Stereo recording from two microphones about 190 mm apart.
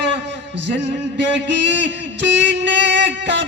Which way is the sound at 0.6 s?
65° right (ahead or behind).